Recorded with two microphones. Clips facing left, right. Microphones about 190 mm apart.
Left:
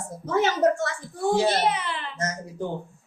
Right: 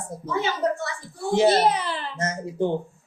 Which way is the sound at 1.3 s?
35° right (ahead or behind).